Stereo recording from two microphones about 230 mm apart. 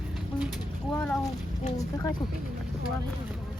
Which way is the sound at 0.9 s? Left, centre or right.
Centre.